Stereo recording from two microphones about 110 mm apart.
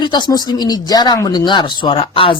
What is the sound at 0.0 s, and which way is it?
A woman's voice, 40° left (ahead or behind).